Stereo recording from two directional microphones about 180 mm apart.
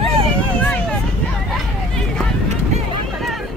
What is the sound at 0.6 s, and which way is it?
Vehicle, 5° left (ahead or behind).